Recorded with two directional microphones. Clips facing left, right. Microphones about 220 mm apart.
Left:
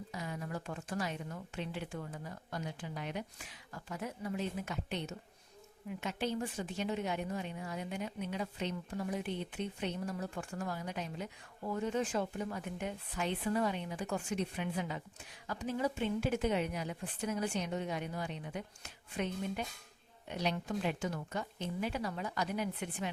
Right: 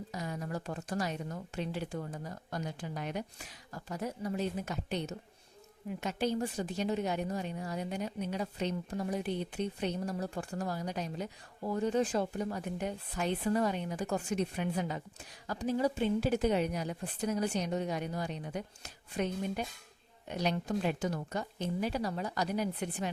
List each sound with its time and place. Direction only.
0.1 s a woman's voice: 40° right (ahead or behind)